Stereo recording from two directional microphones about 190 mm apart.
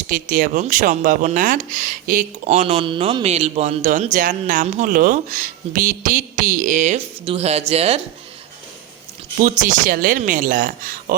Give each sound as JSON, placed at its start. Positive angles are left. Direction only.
{"t": 0.1, "sound": "speech", "side_deg": -45}
{"t": 9.4, "sound": "speech", "side_deg": -45}